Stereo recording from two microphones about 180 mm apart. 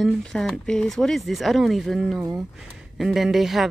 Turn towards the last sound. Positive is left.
turn(degrees=0)  # may be behind; listen again after turning